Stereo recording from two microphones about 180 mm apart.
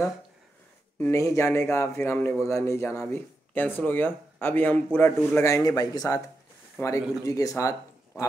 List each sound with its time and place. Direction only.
0.9 s speech: 15° left (ahead or behind)